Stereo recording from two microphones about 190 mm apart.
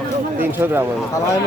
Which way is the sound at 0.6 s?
10° right (ahead or behind).